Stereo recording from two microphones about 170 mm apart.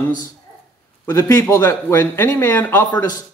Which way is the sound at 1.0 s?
15° left (ahead or behind).